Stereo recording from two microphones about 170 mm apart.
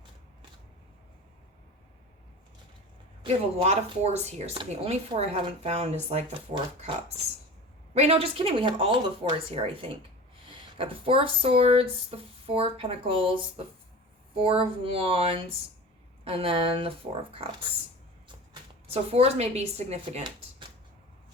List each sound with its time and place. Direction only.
3.2 s speech: 40° right (ahead or behind)
7.9 s speech: 40° right (ahead or behind)
14.3 s speech: 30° right (ahead or behind)
18.9 s speech: 40° right (ahead or behind)